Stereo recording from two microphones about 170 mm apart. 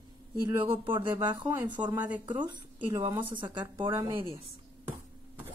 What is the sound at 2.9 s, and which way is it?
A woman's voice, 25° right (ahead or behind).